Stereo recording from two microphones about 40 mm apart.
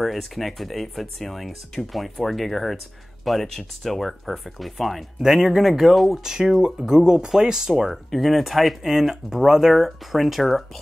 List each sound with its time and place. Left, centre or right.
0.0 s speech: centre
6.2 s speech: centre
7.7 s speech: centre